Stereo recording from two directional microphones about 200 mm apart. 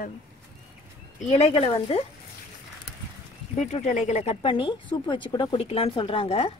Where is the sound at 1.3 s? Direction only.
30° left (ahead or behind).